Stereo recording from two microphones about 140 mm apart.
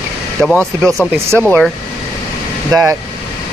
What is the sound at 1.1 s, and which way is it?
Speech, 15° right (ahead or behind).